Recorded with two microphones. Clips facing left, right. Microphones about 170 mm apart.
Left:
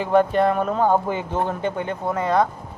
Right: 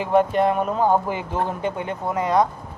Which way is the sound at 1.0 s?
25° left (ahead or behind).